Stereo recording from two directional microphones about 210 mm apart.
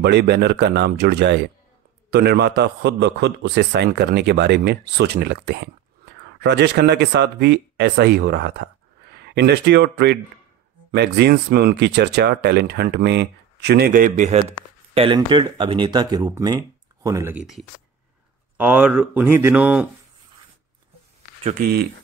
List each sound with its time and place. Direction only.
0.0 s a man's voice: 50° right (ahead or behind); by 14.4 s 35° right (ahead or behind)
15.0 s speech: 25° right (ahead or behind); by 19.9 s 5° right (ahead or behind)
21.5 s a man's voice: 45° right (ahead or behind)